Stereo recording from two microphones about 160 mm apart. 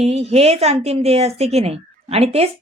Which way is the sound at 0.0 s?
40° right (ahead or behind).